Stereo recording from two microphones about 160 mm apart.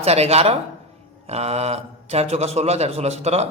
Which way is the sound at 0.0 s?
40° right (ahead or behind).